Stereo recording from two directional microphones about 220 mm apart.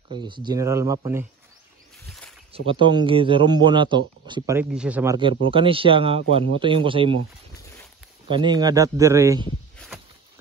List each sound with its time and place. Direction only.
0.1 s speech: 20° right (ahead or behind)
2.0 s a sound: 5° left (ahead or behind)
2.5 s speech: 25° right (ahead or behind); by 5.1 s 5° right (ahead or behind)
5.4 s speech: 25° right (ahead or behind)
8.3 s speech: 20° right (ahead or behind)